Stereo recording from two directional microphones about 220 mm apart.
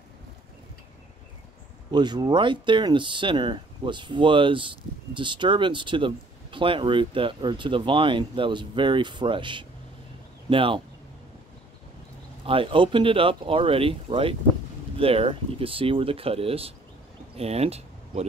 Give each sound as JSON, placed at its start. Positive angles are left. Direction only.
{"t": 1.9, "sound": "speech", "side_deg": -20}
{"t": 12.4, "sound": "speech", "side_deg": -25}